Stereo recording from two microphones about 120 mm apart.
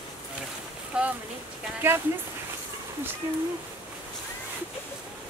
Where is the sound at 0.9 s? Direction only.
10° right (ahead or behind).